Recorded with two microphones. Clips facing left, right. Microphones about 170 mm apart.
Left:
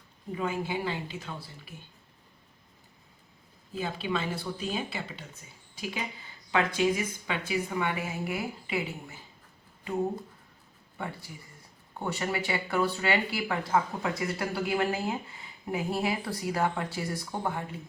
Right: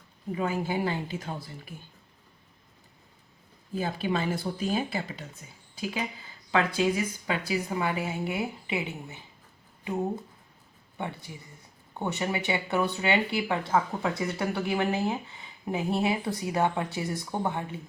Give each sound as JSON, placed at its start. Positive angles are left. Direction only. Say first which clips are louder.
{"t": 0.3, "sound": "speech", "louder": "right 2 dB", "side_deg": -40}
{"t": 3.8, "sound": "speech", "louder": "right 3 dB", "side_deg": -45}
{"t": 6.5, "sound": "speech", "louder": "right 1 dB", "side_deg": -30}
{"t": 10.9, "sound": "speech", "louder": "right 2 dB", "side_deg": -20}